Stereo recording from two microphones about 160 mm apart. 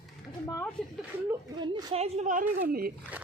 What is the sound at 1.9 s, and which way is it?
Speech, 40° right (ahead or behind).